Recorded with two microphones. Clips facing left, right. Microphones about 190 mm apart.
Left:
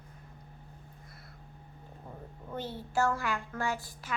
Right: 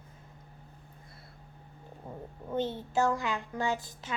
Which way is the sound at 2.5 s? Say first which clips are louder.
Right 6 dB; 20° right (ahead or behind).